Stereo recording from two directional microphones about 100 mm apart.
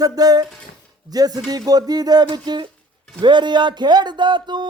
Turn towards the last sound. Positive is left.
turn(degrees=-50)  # may be behind; listen again after turning